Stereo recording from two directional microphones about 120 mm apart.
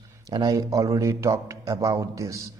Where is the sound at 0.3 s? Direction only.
30° right (ahead or behind).